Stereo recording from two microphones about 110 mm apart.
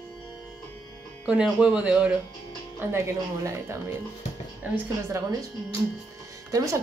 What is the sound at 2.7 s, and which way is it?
A woman's voice, 25° right (ahead or behind).